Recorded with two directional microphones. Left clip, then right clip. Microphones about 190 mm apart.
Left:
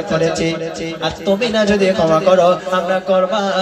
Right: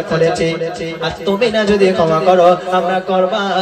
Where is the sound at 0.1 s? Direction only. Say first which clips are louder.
Right 3 dB; 30° left (ahead or behind).